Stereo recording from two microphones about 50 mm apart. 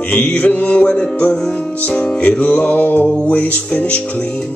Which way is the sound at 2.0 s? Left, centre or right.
Centre.